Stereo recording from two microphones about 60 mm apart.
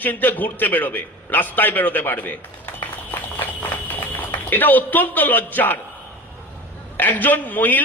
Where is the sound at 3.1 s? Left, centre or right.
Left.